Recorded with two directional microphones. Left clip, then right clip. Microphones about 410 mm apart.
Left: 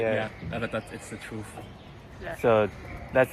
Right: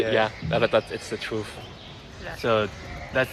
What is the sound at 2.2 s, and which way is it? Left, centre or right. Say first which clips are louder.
Speech: left 1 dB; centre.